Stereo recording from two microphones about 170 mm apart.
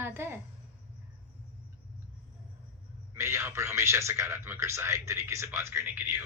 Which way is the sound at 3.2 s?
15° right (ahead or behind).